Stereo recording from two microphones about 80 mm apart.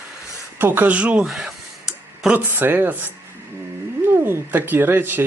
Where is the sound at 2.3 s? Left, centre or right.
Right.